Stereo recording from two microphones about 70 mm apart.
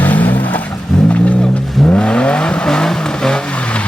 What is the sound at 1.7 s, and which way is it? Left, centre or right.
Vehicle, centre.